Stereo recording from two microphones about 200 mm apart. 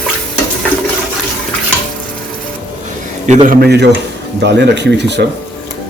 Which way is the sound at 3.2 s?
40° right (ahead or behind).